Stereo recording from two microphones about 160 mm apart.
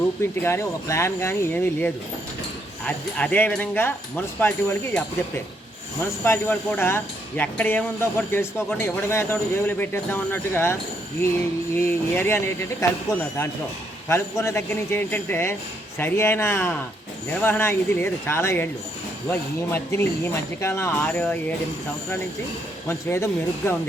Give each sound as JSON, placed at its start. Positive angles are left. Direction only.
{"t": 0.2, "sound": "speech", "side_deg": 15}
{"t": 6.2, "sound": "speech", "side_deg": 15}
{"t": 22.9, "sound": "speech", "side_deg": 15}